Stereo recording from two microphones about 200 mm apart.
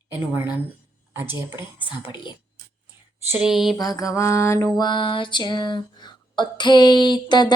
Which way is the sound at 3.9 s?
15° left (ahead or behind).